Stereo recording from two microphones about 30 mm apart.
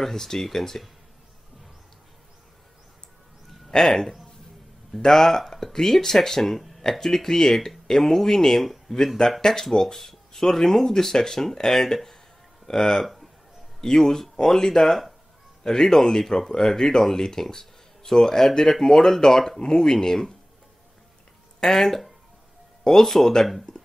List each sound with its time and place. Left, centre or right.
0.0 s speech: centre
3.7 s speech: centre
13.0 s a sound: centre
13.7 s speech: centre
15.6 s speech: centre
21.5 s speech: centre